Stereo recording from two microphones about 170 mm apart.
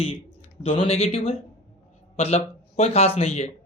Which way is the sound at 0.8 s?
40° left (ahead or behind).